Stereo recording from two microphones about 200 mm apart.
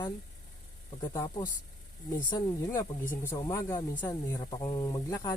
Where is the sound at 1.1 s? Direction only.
15° left (ahead or behind).